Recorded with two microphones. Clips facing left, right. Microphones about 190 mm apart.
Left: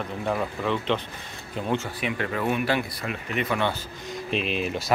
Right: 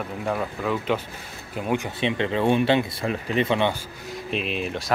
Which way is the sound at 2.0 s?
25° right (ahead or behind).